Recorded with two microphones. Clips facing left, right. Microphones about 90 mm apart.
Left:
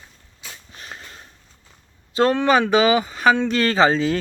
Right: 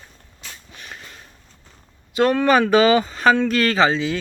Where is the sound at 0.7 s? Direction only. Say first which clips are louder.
Left 1 dB; 30° left (ahead or behind).